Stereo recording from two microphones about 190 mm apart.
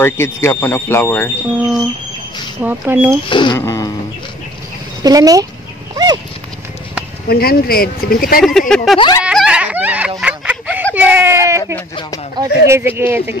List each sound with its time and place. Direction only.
0.0 s speech: 15° left (ahead or behind)
1.6 s speech: centre (ahead or behind)
3.3 s speech: 25° left (ahead or behind)
5.0 s speech: 20° right (ahead or behind)
7.2 s speech: 55° left (ahead or behind)
8.4 s speech: centre (ahead or behind)
8.9 s speech: 25° left (ahead or behind)
9.2 s snicker: 5° right (ahead or behind)
11.0 s speech: 10° right (ahead or behind)
12.6 s speech: 10° right (ahead or behind)